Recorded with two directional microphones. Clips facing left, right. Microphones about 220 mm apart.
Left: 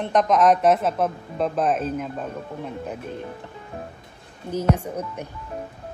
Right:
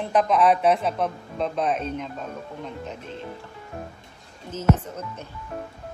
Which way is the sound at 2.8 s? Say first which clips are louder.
Left 4 dB; 50° left (ahead or behind).